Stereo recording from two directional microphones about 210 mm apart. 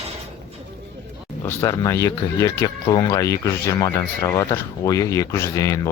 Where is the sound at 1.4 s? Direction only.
15° left (ahead or behind).